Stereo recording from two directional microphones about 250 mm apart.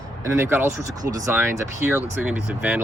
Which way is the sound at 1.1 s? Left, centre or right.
Centre.